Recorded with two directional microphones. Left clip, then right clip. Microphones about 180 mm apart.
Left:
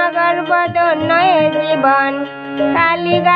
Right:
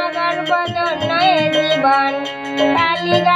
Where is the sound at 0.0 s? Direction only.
30° left (ahead or behind).